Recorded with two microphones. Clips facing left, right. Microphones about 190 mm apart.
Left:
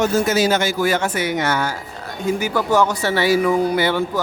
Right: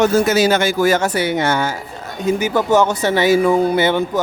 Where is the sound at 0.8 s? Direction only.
40° right (ahead or behind).